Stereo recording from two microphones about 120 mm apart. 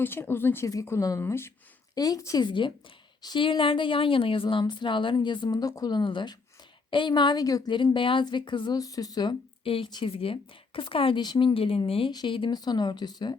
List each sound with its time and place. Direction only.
0.0 s a woman's voice: 20° left (ahead or behind)
9.6 s a woman's voice: 50° left (ahead or behind)